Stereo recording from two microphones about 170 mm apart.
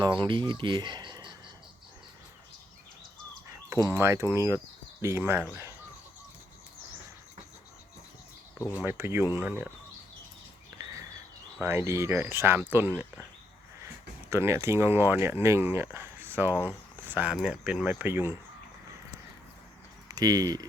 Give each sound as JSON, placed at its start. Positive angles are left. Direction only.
{"t": 0.0, "sound": "speech", "side_deg": -25}
{"t": 3.7, "sound": "speech", "side_deg": -15}
{"t": 8.5, "sound": "speech", "side_deg": 20}
{"t": 8.8, "sound": "speech", "side_deg": -15}
{"t": 10.8, "sound": "a sound", "side_deg": -20}
{"t": 11.6, "sound": "speech", "side_deg": -15}
{"t": 20.1, "sound": "speech", "side_deg": -20}